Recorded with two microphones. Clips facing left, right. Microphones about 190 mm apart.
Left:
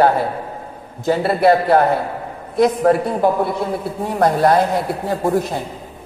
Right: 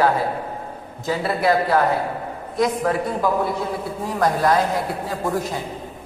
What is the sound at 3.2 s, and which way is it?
A man's voice, 65° left (ahead or behind).